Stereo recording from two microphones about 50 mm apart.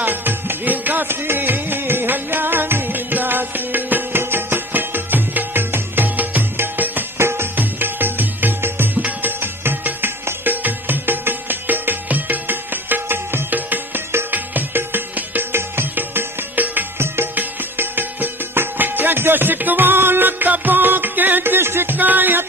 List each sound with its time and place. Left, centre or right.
0.0 s music: right
1.0 s music: right
7.2 s music: right
7.5 s music: right
9.0 s music: right
9.4 s music: right
15.5 s music: right
21.9 s music: right